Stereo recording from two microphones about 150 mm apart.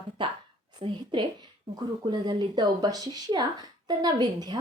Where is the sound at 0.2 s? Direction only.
30° right (ahead or behind).